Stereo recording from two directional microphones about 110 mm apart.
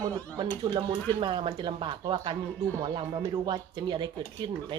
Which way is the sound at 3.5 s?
45° right (ahead or behind).